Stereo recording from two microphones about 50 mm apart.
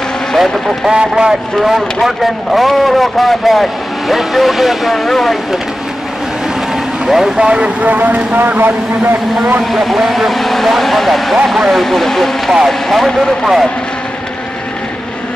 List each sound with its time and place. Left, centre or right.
0.4 s speech: centre
0.9 s speech: centre
1.6 s speech: centre
7.1 s speech: centre
7.4 s speech: right
9.7 s speech: centre